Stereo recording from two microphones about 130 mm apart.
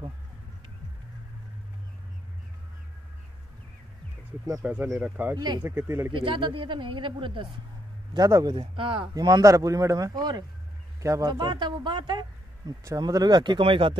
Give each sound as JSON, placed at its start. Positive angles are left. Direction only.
{"t": 4.6, "sound": "speech", "side_deg": -15}
{"t": 5.3, "sound": "speech", "side_deg": -35}
{"t": 5.6, "sound": "speech", "side_deg": -15}
{"t": 6.1, "sound": "speech", "side_deg": -40}
{"t": 8.1, "sound": "a man's voice", "side_deg": -25}
{"t": 8.5, "sound": "speech", "side_deg": -45}
{"t": 9.1, "sound": "a man's voice", "side_deg": -30}